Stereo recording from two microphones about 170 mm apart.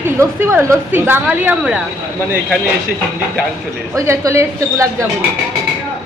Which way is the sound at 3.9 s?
20° right (ahead or behind).